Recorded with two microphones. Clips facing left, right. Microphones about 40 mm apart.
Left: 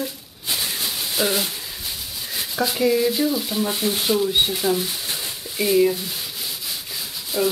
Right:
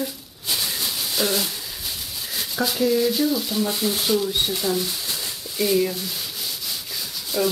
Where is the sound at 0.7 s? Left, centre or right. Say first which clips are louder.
Left 1 dB; centre.